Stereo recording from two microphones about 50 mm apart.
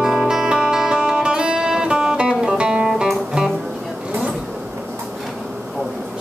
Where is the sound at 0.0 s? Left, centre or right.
Centre.